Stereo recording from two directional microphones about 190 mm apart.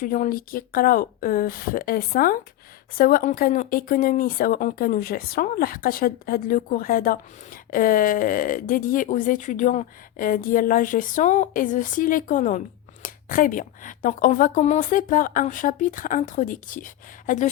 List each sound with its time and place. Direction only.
0.0 s speech: 45° left (ahead or behind)